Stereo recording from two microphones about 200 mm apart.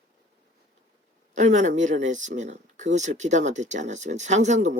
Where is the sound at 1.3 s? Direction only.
35° right (ahead or behind).